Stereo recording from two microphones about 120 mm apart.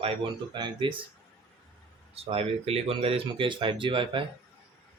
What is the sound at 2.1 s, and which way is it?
Speech, 55° right (ahead or behind).